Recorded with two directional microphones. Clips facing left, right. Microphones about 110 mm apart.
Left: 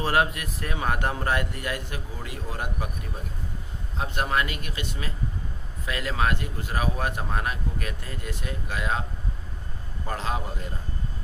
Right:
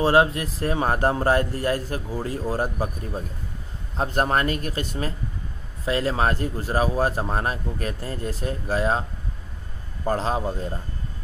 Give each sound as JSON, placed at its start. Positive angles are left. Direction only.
{"t": 0.0, "sound": "speech", "side_deg": -30}
{"t": 3.9, "sound": "speech", "side_deg": -40}
{"t": 10.0, "sound": "speech", "side_deg": -35}